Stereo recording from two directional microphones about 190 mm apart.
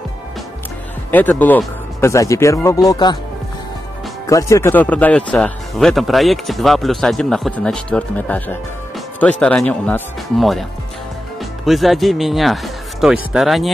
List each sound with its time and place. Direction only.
1.1 s speech: 10° left (ahead or behind)
4.3 s speech: 15° left (ahead or behind)
11.6 s speech: centre (ahead or behind)